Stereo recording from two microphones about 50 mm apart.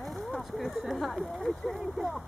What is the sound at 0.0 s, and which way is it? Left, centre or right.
Speech, centre.